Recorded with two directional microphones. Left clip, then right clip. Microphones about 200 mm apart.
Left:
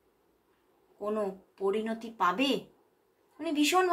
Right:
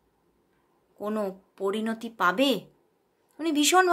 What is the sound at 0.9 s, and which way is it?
A woman's voice, 45° right (ahead or behind).